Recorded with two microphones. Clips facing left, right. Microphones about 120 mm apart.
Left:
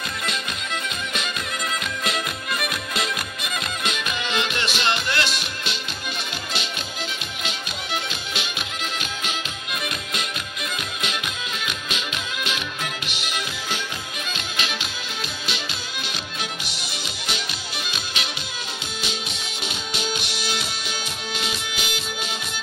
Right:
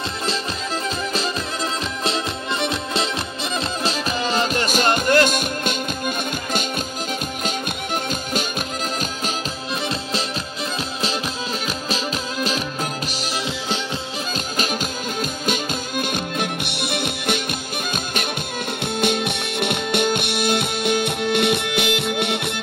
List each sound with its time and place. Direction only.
2.0 s music: 30° right (ahead or behind); by 8.5 s 45° right (ahead or behind)
11.6 s music: 35° right (ahead or behind)
14.6 s music: 45° right (ahead or behind); by 22.6 s 65° right (ahead or behind)